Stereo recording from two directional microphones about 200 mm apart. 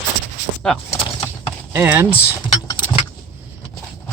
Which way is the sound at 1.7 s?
10° right (ahead or behind).